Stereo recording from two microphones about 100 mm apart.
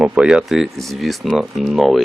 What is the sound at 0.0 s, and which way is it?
Speech, 10° right (ahead or behind).